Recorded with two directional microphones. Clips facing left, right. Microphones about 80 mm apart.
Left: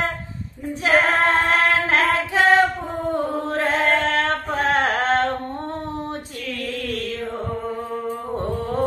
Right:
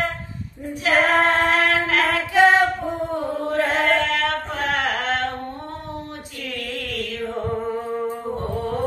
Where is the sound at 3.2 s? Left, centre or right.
Left.